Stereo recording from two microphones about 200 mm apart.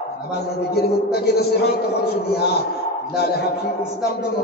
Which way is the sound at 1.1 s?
55° left (ahead or behind).